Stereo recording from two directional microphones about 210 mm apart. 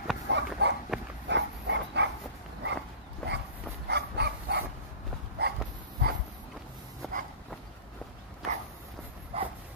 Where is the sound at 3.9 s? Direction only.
50° right (ahead or behind).